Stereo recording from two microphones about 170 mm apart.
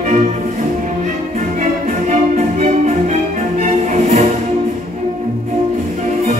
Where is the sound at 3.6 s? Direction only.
45° right (ahead or behind).